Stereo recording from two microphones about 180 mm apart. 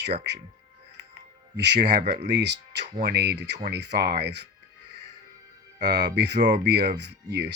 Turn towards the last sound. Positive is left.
turn(degrees=-70)  # may be behind; listen again after turning